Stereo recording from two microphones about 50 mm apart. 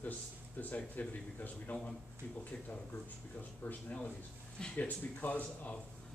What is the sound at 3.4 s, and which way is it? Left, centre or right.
Speech, left.